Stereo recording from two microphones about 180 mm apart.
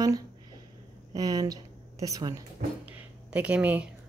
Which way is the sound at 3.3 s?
10° right (ahead or behind).